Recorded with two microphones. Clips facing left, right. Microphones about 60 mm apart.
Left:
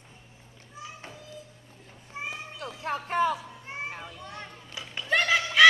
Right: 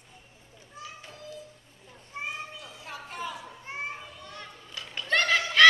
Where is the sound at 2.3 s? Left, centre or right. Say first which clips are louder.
Left 3 dB; left.